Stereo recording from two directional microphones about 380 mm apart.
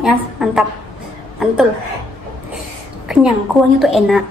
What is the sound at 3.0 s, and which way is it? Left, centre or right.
A woman's voice, centre.